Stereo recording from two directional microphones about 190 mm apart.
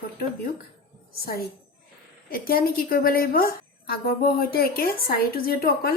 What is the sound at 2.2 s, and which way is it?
A woman's voice, 50° left (ahead or behind).